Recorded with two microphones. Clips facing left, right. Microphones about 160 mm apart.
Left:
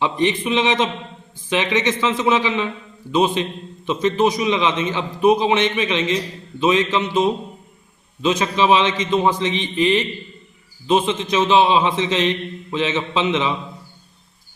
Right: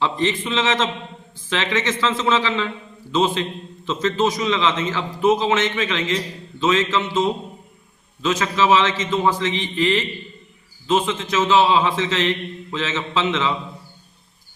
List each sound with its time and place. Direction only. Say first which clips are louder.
0.0 s a man's voice: left 2 dB; 15° left (ahead or behind)